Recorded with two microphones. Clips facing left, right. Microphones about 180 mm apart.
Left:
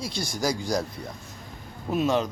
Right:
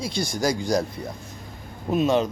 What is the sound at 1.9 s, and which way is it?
Speech, 20° right (ahead or behind).